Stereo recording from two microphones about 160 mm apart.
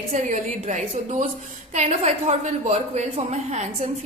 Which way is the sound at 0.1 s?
50° right (ahead or behind).